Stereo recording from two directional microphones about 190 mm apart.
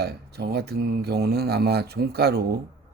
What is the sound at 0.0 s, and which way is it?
Speech, 60° right (ahead or behind).